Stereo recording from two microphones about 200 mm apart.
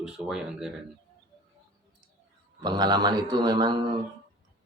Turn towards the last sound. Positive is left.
turn(degrees=-20)  # may be behind; listen again after turning